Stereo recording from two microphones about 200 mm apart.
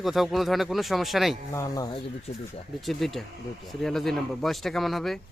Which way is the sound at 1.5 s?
15° left (ahead or behind).